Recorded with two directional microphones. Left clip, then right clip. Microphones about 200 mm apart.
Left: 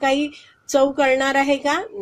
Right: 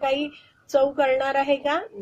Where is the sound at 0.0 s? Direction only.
30° left (ahead or behind).